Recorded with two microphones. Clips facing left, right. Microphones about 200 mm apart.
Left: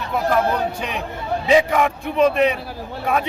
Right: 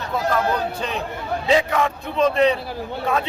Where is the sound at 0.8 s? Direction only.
15° left (ahead or behind).